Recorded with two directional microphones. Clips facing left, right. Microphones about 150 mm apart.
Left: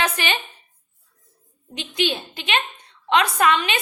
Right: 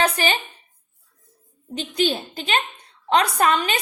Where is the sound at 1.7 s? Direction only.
40° right (ahead or behind).